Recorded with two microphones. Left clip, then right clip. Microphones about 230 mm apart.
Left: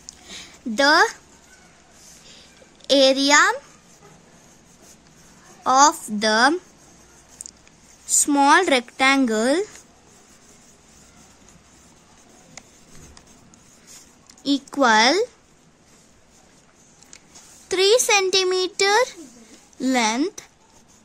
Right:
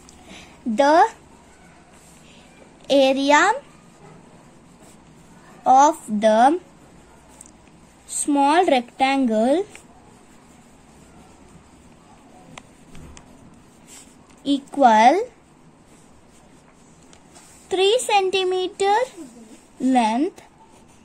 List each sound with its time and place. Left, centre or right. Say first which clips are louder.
0.3 s a sound: right 3 dB; left
2.9 s speech: even; left
5.6 s speech: right 2 dB; left
8.2 s a woman's voice: left 1 dB; left
14.4 s speech: right 3 dB; left
17.6 s a woman's voice: left 1 dB; left